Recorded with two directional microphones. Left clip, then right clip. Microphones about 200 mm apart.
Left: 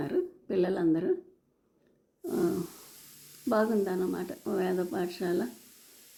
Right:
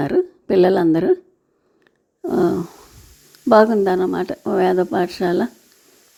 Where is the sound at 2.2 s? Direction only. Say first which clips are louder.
Right 12 dB; 40° right (ahead or behind).